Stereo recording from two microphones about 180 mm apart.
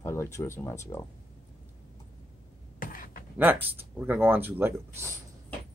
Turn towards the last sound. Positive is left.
turn(degrees=-10)  # may be behind; listen again after turning